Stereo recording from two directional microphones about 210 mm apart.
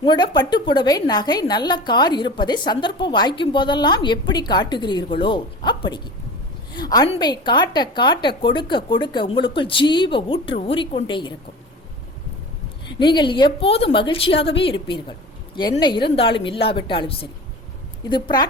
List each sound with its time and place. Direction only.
0.0 s a woman's voice: 20° left (ahead or behind)
13.0 s a woman's voice: 20° left (ahead or behind)